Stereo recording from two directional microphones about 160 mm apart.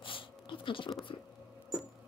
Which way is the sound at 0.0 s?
30° left (ahead or behind).